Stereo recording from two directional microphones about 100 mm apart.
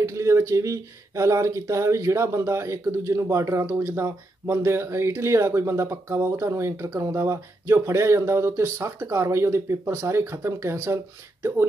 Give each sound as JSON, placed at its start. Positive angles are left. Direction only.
{"t": 0.0, "sound": "speech", "side_deg": -30}